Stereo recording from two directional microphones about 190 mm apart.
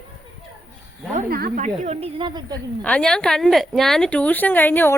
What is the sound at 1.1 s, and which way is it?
Speech, 45° right (ahead or behind).